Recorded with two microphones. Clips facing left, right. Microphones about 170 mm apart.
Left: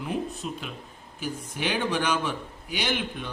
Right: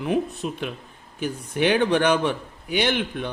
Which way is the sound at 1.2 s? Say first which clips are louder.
Right 8 dB; 60° right (ahead or behind).